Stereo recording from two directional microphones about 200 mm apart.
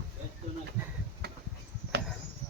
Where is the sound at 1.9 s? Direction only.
55° right (ahead or behind).